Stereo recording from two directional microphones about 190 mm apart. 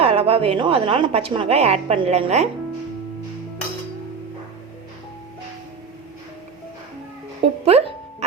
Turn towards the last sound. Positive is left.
turn(degrees=-30)  # may be behind; listen again after turning